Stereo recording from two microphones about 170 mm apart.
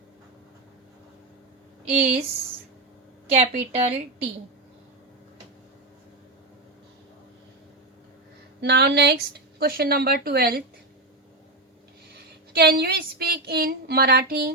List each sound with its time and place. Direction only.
1.9 s a woman's voice: 40° right (ahead or behind)
3.2 s a woman's voice: 40° right (ahead or behind)
8.6 s speech: 75° right (ahead or behind)
12.1 s a woman's voice: 70° right (ahead or behind)